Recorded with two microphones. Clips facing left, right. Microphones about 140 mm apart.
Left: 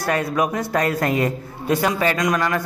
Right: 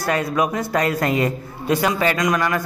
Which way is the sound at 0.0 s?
50° left (ahead or behind).